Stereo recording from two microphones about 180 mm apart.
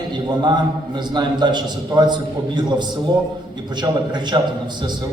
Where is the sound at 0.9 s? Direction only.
25° right (ahead or behind).